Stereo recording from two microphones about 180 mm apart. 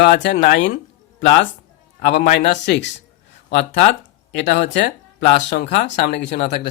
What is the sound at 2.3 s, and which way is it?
Speech, 70° left (ahead or behind).